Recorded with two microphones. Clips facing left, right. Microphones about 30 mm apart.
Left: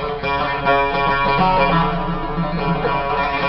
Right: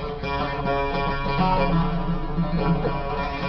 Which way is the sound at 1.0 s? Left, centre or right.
Left.